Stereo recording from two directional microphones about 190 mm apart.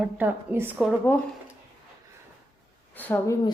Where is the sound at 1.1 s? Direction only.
10° left (ahead or behind).